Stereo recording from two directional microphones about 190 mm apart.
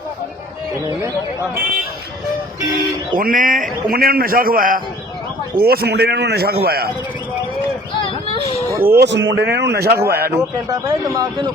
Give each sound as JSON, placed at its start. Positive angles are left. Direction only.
{"t": 3.2, "sound": "a man's voice", "side_deg": -45}
{"t": 8.8, "sound": "speech", "side_deg": -55}
{"t": 10.7, "sound": "speech", "side_deg": -20}